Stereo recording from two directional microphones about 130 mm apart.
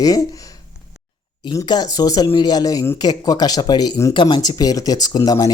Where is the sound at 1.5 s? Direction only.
30° left (ahead or behind).